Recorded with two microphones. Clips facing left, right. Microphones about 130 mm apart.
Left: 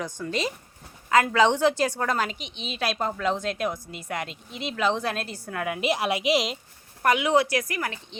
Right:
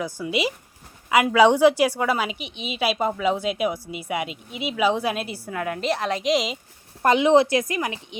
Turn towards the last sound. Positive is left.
turn(degrees=-20)  # may be behind; listen again after turning